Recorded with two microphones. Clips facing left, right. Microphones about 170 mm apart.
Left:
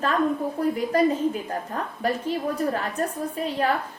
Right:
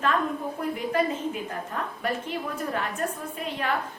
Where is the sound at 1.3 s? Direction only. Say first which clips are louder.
Left 3 dB; 35° left (ahead or behind).